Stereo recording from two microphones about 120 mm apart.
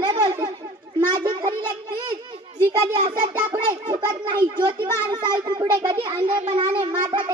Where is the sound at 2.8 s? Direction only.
35° right (ahead or behind).